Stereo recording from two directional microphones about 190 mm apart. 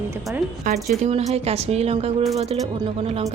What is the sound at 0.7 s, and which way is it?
A woman's voice, 45° right (ahead or behind).